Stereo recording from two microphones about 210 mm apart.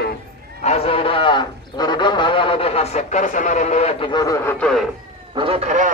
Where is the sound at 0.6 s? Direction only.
30° left (ahead or behind).